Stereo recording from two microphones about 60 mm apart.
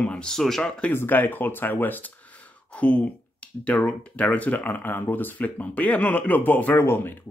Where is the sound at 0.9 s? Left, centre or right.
Left.